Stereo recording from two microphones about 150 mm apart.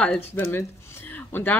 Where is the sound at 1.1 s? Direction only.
10° left (ahead or behind).